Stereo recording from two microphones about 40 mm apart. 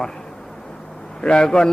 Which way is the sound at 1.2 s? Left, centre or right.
Left.